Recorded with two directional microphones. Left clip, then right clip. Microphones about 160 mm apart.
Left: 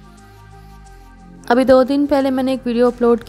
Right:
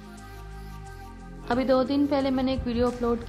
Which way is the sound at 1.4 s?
55° left (ahead or behind).